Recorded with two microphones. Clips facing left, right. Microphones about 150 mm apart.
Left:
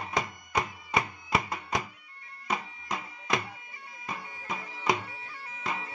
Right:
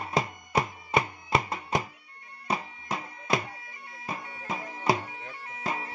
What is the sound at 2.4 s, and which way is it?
Bagpipes, 30° right (ahead or behind).